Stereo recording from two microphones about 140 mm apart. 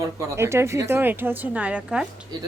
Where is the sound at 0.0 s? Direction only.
20° right (ahead or behind).